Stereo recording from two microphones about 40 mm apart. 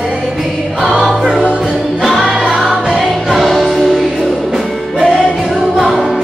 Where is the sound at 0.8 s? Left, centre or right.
Centre.